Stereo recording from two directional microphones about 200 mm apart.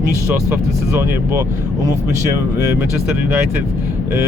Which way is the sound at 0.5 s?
10° right (ahead or behind).